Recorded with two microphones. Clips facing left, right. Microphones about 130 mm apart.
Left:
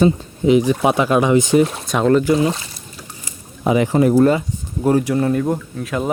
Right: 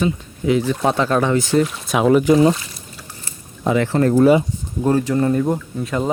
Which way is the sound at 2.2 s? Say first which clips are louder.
Right 3 dB; 25° right (ahead or behind).